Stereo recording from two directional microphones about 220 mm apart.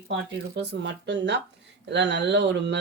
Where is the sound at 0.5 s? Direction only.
50° right (ahead or behind).